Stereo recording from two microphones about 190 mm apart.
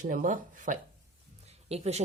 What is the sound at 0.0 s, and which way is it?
Speech, 45° right (ahead or behind).